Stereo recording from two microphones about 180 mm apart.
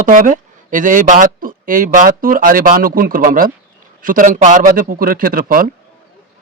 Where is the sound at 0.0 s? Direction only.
50° right (ahead or behind).